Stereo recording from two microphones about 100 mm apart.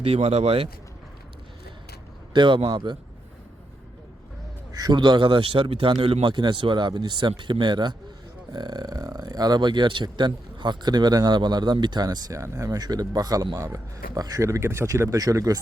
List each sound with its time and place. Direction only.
0.0 s speech: 80° right
2.3 s speech: 50° right (ahead or behind)
4.7 s speech: 45° right (ahead or behind)